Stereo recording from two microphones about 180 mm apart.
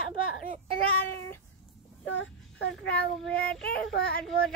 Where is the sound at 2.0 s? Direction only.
90° left.